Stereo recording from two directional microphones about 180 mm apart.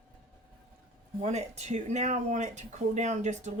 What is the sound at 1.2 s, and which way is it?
Speech, 35° right (ahead or behind).